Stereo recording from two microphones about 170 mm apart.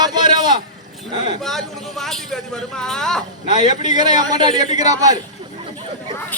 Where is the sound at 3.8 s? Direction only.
25° right (ahead or behind).